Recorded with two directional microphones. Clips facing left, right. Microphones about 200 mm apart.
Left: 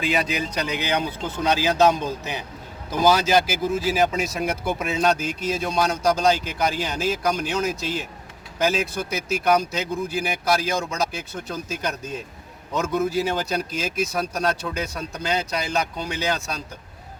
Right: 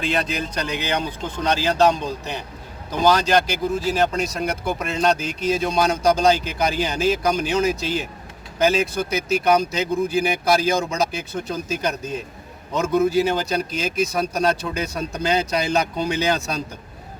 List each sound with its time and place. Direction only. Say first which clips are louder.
0.0 s speech: even; 5° left (ahead or behind)